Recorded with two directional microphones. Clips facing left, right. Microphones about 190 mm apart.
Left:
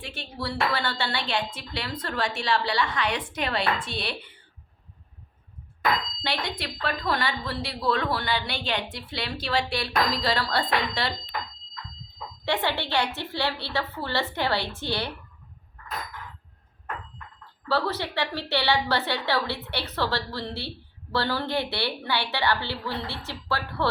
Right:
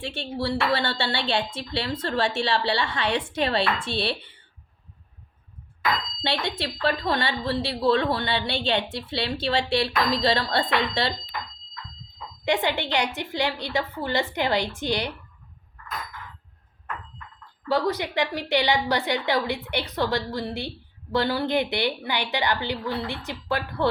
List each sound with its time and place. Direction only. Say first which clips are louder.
0.0 s a woman's voice: right 6 dB; 30° right (ahead or behind)
6.2 s a woman's voice: right 7 dB; 25° right (ahead or behind)
12.5 s a woman's voice: right 3 dB; 15° right (ahead or behind)
17.7 s a woman's voice: right 3 dB; 15° right (ahead or behind)